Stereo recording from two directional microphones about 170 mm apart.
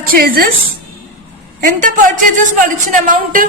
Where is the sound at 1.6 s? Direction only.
50° right (ahead or behind).